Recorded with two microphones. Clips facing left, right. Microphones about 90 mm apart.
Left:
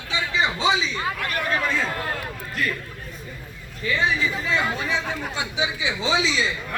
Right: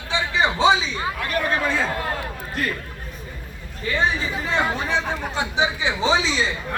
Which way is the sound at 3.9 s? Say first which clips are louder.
Even; 40° right (ahead or behind).